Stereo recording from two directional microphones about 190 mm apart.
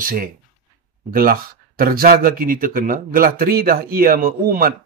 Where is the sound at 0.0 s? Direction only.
50° right (ahead or behind).